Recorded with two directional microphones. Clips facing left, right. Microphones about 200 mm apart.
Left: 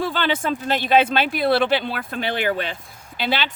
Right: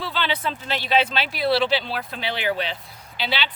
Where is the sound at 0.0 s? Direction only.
50° left (ahead or behind).